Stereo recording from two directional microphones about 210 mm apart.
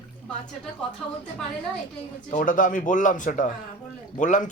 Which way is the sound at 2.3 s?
40° left (ahead or behind).